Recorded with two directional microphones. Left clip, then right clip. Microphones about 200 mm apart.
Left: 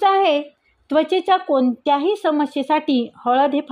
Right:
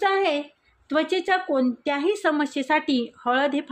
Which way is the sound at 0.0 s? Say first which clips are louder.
Left 6 dB; 35° left (ahead or behind).